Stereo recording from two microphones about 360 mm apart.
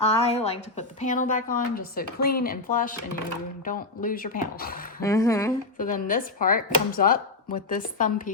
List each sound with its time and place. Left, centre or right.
0.0 s a woman's voice: centre
4.9 s speech: centre
5.7 s a woman's voice: left